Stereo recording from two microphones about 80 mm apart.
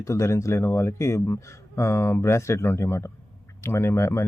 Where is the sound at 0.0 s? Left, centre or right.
Left.